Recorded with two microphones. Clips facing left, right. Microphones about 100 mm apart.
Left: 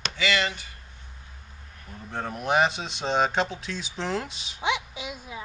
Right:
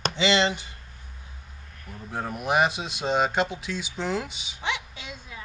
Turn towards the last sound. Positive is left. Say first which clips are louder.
# left 4 dB
turn(degrees=15)  # may be behind; listen again after turning